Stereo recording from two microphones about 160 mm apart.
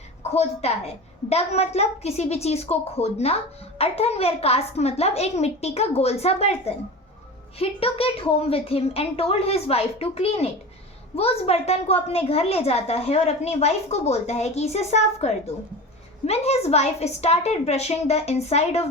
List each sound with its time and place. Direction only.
0.2 s a woman's voice: 40° left (ahead or behind)